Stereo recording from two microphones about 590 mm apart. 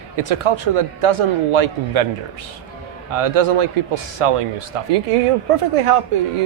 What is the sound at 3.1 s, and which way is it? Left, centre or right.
A man's voice, right.